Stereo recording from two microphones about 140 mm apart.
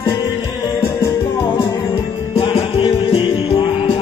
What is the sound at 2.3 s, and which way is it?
Music, 40° left (ahead or behind).